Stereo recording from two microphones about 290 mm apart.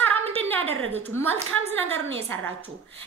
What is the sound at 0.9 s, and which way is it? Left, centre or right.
Speech, centre.